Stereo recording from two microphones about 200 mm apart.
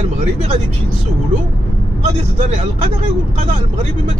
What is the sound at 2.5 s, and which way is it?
Speech, 35° right (ahead or behind).